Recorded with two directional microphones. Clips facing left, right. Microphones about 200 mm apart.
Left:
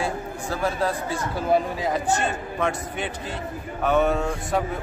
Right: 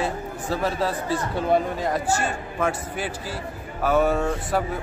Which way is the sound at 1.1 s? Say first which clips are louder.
Right 2 dB; centre (ahead or behind).